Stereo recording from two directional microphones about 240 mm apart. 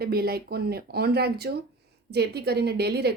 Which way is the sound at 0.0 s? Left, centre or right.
Right.